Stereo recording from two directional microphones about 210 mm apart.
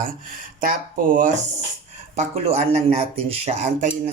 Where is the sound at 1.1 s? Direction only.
40° right (ahead or behind).